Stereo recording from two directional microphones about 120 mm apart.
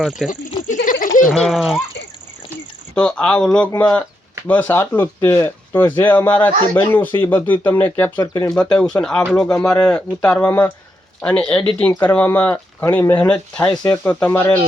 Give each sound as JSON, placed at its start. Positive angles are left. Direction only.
{"t": 0.2, "sound": "speech", "side_deg": 0}
{"t": 0.7, "sound": "a sound", "side_deg": 90}
{"t": 1.5, "sound": "speech", "side_deg": 0}
{"t": 2.9, "sound": "speech", "side_deg": 10}
{"t": 8.2, "sound": "speech", "side_deg": 30}
{"t": 8.5, "sound": "speech", "side_deg": 5}
{"t": 13.2, "sound": "speech", "side_deg": 5}